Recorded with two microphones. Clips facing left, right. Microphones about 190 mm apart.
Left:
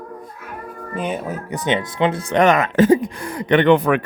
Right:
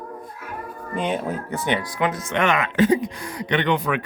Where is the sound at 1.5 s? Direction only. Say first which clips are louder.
Left 5 dB; 20° left (ahead or behind).